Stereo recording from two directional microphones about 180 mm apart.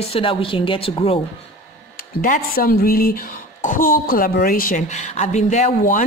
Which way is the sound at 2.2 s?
50° left (ahead or behind).